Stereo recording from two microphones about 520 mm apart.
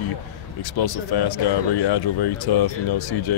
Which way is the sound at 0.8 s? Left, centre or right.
Left.